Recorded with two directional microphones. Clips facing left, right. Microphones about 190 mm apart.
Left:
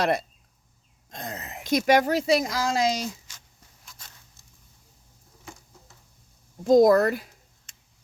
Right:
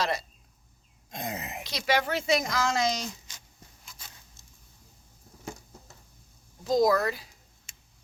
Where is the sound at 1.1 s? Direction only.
15° right (ahead or behind).